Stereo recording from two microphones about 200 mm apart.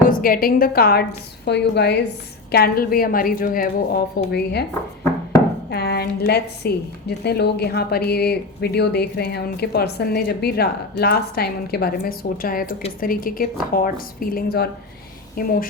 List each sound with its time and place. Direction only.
0.1 s a woman's voice: 45° left (ahead or behind)
5.7 s a woman's voice: 55° left (ahead or behind)